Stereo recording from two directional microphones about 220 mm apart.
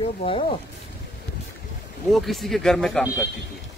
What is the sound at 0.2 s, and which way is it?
Speech, 25° left (ahead or behind).